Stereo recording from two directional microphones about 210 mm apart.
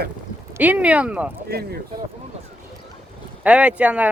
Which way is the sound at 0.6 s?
5° right (ahead or behind).